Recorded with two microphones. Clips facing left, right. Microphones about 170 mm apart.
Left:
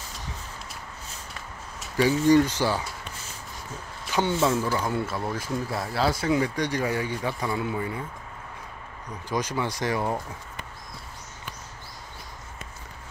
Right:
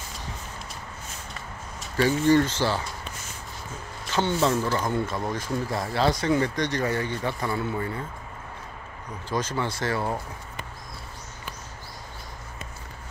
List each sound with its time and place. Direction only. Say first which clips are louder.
2.2 s speech: left 1 dB; 15° left (ahead or behind)
4.1 s speech: even; 10° left (ahead or behind)
9.3 s speech: even; 15° left (ahead or behind)